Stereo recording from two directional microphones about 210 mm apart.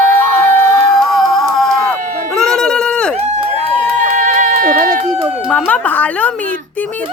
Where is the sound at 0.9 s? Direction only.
Centre (ahead or behind).